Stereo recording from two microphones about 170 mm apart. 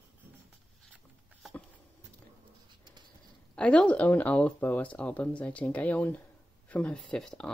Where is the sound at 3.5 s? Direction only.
5° left (ahead or behind).